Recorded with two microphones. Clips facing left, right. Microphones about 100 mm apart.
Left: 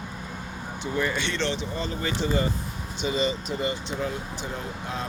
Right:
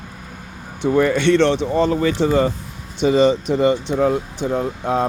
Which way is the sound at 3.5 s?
90° right.